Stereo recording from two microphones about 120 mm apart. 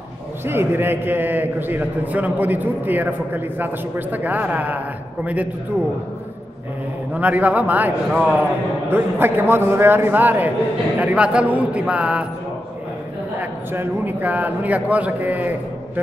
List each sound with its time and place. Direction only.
0.5 s a man's voice: 20° right (ahead or behind)
7.2 s a man's voice: 15° right (ahead or behind)
13.4 s a man's voice: 15° right (ahead or behind)